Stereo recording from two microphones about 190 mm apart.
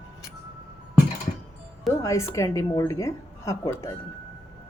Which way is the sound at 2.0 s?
15° left (ahead or behind).